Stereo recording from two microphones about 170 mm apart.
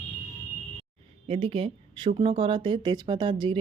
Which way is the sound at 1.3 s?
35° right (ahead or behind).